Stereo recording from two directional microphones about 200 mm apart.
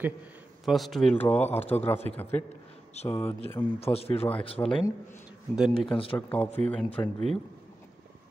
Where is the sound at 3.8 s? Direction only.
30° left (ahead or behind).